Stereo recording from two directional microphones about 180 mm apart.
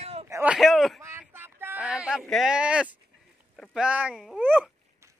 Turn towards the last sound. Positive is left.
turn(degrees=0)  # may be behind; listen again after turning